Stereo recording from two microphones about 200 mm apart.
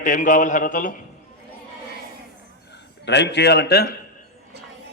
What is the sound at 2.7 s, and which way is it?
A man's voice, 60° left (ahead or behind).